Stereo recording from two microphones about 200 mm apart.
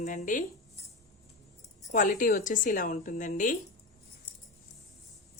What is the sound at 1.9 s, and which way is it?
A woman's voice, 40° left (ahead or behind).